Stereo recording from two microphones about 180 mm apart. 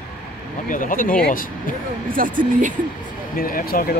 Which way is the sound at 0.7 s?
50° left (ahead or behind).